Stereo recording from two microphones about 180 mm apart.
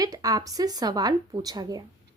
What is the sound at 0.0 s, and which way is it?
A woman's voice, 20° right (ahead or behind).